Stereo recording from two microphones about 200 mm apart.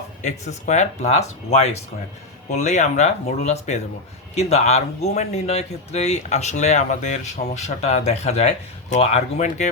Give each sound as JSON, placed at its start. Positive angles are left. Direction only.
{"t": 0.2, "sound": "speech", "side_deg": 35}